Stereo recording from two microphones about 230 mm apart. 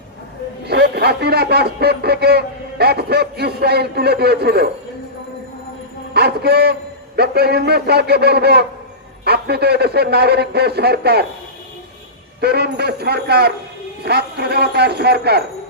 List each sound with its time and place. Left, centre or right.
0.6 s a man's voice: right
6.1 s a man's voice: right
12.4 s a man's voice: right